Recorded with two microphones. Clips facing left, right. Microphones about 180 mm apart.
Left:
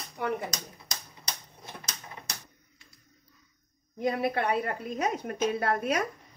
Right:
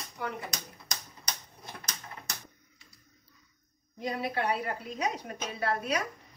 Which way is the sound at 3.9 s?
55° left (ahead or behind).